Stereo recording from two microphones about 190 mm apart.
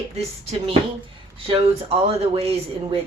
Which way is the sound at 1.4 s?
30° right (ahead or behind).